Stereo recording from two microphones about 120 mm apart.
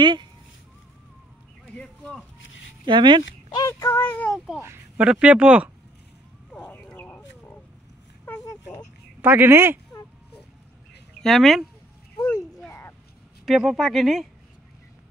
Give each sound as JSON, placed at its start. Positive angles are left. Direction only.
{"t": 0.0, "sound": "speech", "side_deg": -40}
{"t": 1.7, "sound": "speech", "side_deg": 5}
{"t": 2.8, "sound": "speech", "side_deg": -40}
{"t": 3.5, "sound": "child singing", "side_deg": 25}
{"t": 4.6, "sound": "a sound", "side_deg": -20}
{"t": 5.0, "sound": "speech", "side_deg": -10}
{"t": 6.7, "sound": "a sound", "side_deg": 15}
{"t": 9.2, "sound": "speech", "side_deg": -15}
{"t": 11.2, "sound": "speech", "side_deg": 0}
{"t": 12.6, "sound": "a sound", "side_deg": 20}
{"t": 13.5, "sound": "speech", "side_deg": 0}